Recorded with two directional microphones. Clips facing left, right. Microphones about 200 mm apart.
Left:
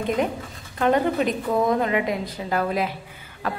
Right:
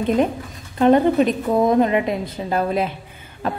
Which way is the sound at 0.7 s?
25° right (ahead or behind).